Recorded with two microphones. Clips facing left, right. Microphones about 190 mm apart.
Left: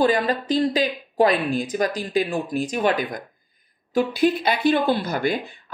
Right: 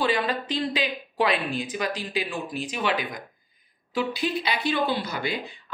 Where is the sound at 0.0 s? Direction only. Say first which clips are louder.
Left 5 dB; 45° left (ahead or behind).